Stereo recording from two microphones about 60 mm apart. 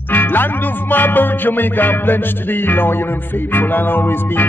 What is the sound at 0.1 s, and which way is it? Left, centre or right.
Music, left.